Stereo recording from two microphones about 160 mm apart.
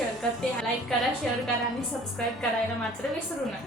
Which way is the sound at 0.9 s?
5° left (ahead or behind).